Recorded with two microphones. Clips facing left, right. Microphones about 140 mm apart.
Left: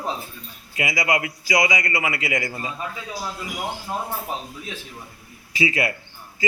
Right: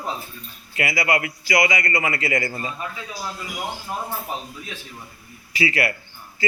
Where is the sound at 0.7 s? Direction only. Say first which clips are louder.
Right 1 dB; 15° left (ahead or behind).